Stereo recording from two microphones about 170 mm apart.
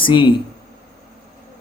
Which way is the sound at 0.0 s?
30° left (ahead or behind).